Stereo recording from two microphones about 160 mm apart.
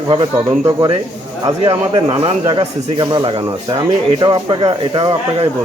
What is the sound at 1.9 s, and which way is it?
Speech, 35° right (ahead or behind).